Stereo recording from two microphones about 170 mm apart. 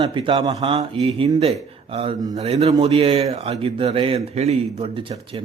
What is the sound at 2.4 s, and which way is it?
Speech, 40° right (ahead or behind).